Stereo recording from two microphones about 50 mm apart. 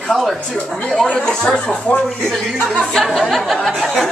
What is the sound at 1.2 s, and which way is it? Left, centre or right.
Speech, centre.